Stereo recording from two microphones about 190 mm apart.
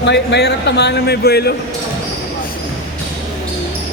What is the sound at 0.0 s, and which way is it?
A man's voice, 65° left (ahead or behind).